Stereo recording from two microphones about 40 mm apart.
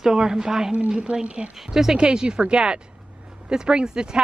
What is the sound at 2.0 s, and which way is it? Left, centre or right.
Speech, right.